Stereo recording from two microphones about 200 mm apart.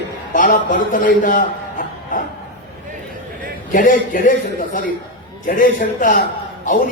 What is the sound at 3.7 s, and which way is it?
A man's voice, 40° left (ahead or behind).